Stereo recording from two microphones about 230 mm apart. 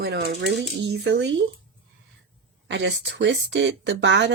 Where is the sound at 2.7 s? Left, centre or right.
Right.